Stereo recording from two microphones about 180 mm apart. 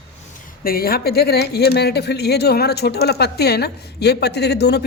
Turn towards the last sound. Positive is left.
turn(degrees=65)  # may be behind; listen again after turning